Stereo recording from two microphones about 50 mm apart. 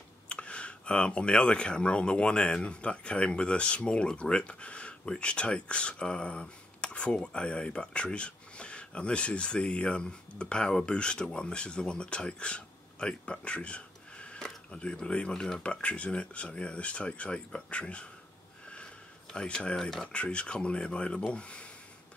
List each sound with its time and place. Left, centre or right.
0.3 s speech: left
19.3 s speech: left
20.1 s speech: left